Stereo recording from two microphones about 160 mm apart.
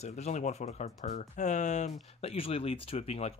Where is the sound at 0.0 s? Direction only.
45° left (ahead or behind).